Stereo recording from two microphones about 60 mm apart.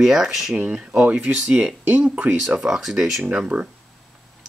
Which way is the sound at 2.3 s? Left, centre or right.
Centre.